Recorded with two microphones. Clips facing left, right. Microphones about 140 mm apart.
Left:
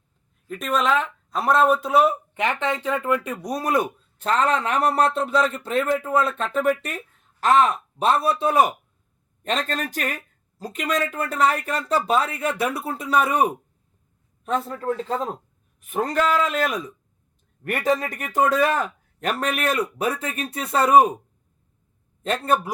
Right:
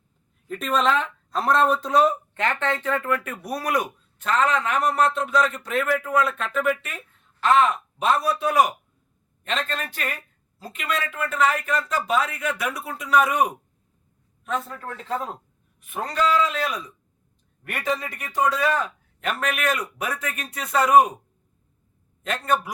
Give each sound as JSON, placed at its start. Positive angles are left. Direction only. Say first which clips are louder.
{"t": 0.4, "sound": "speech", "louder": "even", "side_deg": 0}
{"t": 9.4, "sound": "speech", "louder": "left 3 dB", "side_deg": 40}
{"t": 15.9, "sound": "a man's voice", "louder": "left 1 dB", "side_deg": 50}
{"t": 18.0, "sound": "a man's voice", "louder": "left 2 dB", "side_deg": 45}
{"t": 19.2, "sound": "speech", "louder": "left 2 dB", "side_deg": 35}